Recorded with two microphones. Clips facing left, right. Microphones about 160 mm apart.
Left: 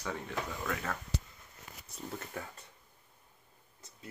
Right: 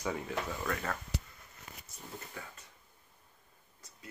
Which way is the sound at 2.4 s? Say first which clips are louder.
Left 6 dB; 50° left (ahead or behind).